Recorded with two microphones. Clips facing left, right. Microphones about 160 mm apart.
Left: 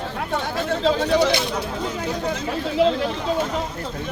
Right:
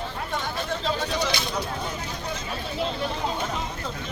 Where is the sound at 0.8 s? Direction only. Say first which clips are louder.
Left 10 dB; 70° left (ahead or behind).